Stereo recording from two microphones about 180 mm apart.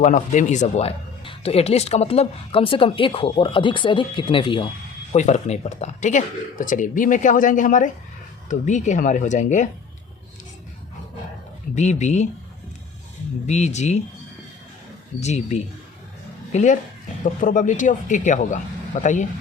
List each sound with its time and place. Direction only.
0.0 s speech: 45° left (ahead or behind); by 4.7 s 30° left (ahead or behind)
5.1 s speech: 40° left (ahead or behind)
11.7 s speech: 40° left (ahead or behind)
13.5 s speech: 40° left (ahead or behind)
15.2 s speech: 40° left (ahead or behind)